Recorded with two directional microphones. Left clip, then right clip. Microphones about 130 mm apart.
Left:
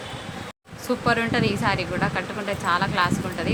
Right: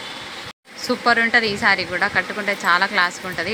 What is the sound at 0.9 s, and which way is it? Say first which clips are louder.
Speech: right 6 dB; 20° right (ahead or behind).